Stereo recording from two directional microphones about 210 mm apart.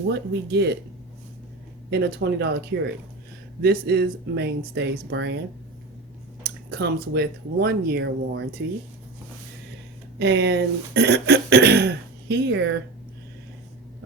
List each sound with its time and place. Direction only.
0.1 s speech: 55° right (ahead or behind)
1.9 s speech: 50° right (ahead or behind)
6.4 s speech: 50° right (ahead or behind)
10.2 s speech: 55° right (ahead or behind)